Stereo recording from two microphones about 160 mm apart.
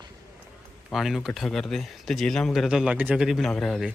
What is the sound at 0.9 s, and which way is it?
A man's voice, centre (ahead or behind).